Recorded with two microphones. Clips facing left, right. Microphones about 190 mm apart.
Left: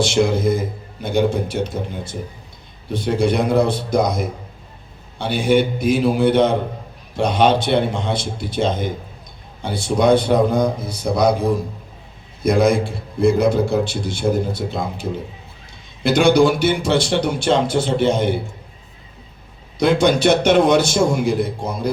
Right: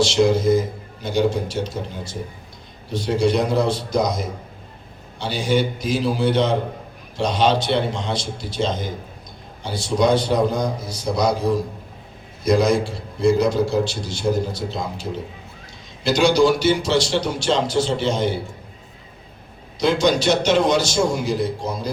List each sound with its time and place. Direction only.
0.0 s a sound: 55° left (ahead or behind)
1.0 s a man's voice: 55° left (ahead or behind)
16.0 s a man's voice: 55° left (ahead or behind)
19.8 s a man's voice: 55° left (ahead or behind)